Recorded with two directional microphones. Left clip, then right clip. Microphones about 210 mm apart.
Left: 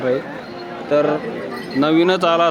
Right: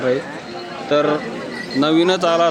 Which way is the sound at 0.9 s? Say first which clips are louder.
Even; 10° right (ahead or behind).